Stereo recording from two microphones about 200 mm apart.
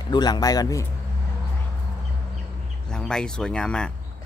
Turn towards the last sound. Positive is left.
turn(degrees=5)  # may be behind; listen again after turning